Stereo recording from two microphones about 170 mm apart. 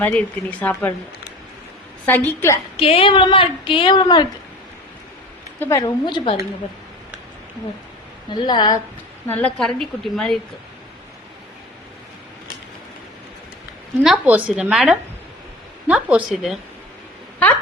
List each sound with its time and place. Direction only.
0.0 s speech: 10° left (ahead or behind)
2.0 s speech: 10° left (ahead or behind)
2.7 s speech: 35° left (ahead or behind)
5.5 s speech: 15° left (ahead or behind)
8.3 s speech: 25° left (ahead or behind)
9.2 s a woman's voice: 10° left (ahead or behind)
14.0 s a woman's voice: 5° right (ahead or behind)